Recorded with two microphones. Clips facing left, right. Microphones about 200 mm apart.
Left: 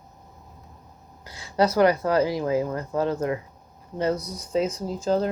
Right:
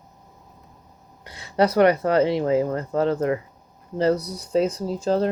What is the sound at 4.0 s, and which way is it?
Speech, 65° right (ahead or behind).